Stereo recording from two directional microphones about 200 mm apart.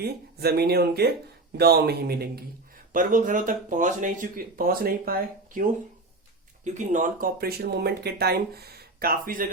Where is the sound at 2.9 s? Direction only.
40° right (ahead or behind).